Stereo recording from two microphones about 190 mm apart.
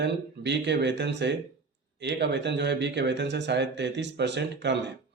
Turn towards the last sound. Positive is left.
turn(degrees=-65)  # may be behind; listen again after turning